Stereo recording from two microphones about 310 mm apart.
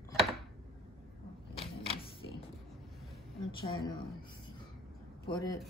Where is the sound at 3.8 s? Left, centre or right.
Centre.